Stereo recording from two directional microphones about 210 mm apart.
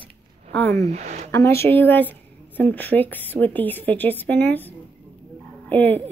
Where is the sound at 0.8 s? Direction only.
30° right (ahead or behind).